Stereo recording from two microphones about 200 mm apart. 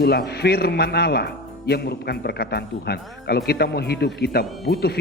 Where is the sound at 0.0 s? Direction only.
50° left (ahead or behind).